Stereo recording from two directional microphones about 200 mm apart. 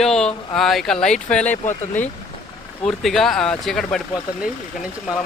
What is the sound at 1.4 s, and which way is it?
Speech, 35° left (ahead or behind).